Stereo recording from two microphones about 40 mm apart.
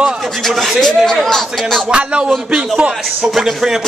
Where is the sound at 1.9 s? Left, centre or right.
Right.